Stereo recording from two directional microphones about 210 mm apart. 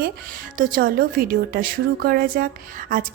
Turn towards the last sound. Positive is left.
turn(degrees=-45)  # may be behind; listen again after turning